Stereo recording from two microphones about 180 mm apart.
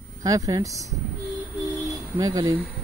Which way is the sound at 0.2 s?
20° right (ahead or behind).